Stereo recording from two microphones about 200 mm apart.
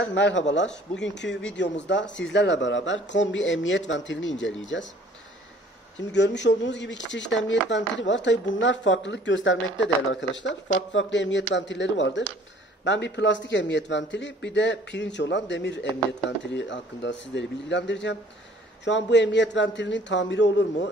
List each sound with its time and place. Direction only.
0.0 s a man's voice: 65° left (ahead or behind)
5.9 s a man's voice: 60° left (ahead or behind)